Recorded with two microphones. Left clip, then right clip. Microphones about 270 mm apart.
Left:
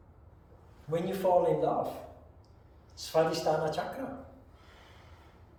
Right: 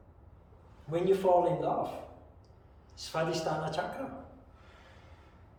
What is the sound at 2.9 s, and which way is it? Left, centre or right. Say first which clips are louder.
Speech: left 5 dB; centre.